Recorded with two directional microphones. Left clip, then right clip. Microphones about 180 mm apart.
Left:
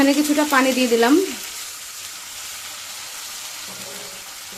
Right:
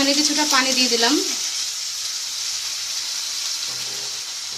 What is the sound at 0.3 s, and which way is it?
Speech, 45° left (ahead or behind).